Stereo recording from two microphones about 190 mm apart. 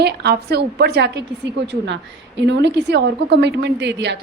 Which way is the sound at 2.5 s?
65° right (ahead or behind).